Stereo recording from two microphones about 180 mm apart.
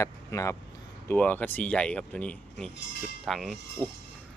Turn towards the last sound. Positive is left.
turn(degrees=0)  # may be behind; listen again after turning